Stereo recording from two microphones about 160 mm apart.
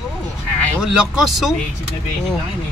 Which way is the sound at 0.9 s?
5° right (ahead or behind).